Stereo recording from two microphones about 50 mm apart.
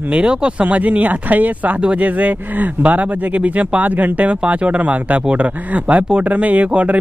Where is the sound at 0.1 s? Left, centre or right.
Centre.